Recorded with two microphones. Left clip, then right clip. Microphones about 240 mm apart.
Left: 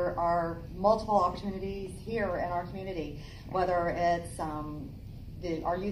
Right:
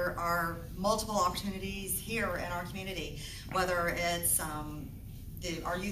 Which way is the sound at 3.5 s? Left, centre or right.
Right.